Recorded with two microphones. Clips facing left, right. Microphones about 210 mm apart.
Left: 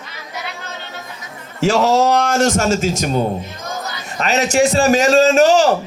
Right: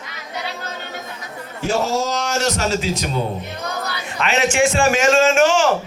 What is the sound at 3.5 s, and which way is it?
Crowd, 65° right (ahead or behind).